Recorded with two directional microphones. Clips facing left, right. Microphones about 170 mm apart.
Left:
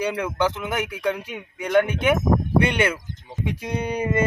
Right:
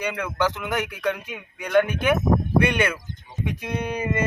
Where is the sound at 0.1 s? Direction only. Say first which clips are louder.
Left 2 dB; 25° left (ahead or behind).